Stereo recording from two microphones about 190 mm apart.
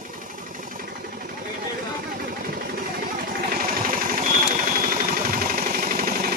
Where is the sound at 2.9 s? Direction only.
55° right (ahead or behind).